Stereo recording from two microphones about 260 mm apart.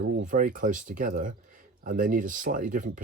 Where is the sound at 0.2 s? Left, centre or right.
Right.